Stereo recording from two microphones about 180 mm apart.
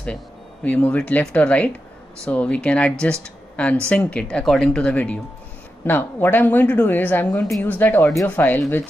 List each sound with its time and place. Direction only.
0.7 s a woman's voice: 5° left (ahead or behind)